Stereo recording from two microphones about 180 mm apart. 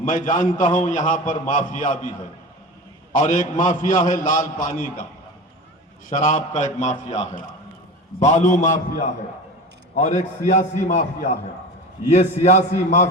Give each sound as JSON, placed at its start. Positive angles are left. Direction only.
{"t": 0.0, "sound": "a man's voice", "side_deg": 45}
{"t": 3.1, "sound": "a man's voice", "side_deg": 45}
{"t": 6.1, "sound": "a man's voice", "side_deg": 45}